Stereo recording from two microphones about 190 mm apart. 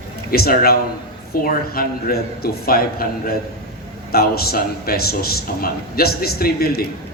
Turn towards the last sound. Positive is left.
turn(degrees=55)  # may be behind; listen again after turning